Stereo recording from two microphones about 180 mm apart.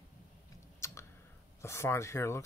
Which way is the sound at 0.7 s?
15° left (ahead or behind).